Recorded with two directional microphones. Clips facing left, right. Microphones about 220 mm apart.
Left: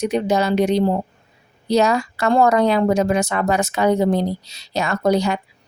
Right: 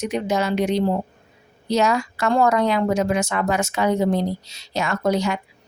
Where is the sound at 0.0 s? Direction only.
35° left (ahead or behind).